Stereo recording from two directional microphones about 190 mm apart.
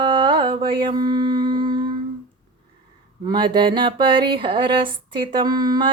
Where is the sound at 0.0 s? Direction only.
25° right (ahead or behind).